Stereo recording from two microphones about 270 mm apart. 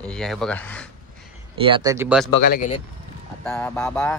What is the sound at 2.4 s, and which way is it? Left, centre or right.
Speech, left.